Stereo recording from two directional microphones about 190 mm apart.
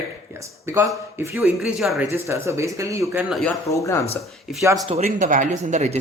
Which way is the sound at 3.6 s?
15° left (ahead or behind).